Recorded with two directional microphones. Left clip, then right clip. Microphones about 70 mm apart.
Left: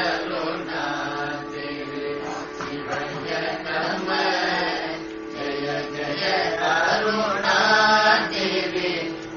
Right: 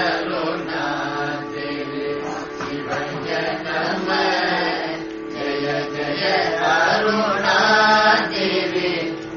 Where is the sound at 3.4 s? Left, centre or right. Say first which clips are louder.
Right 3 dB; left.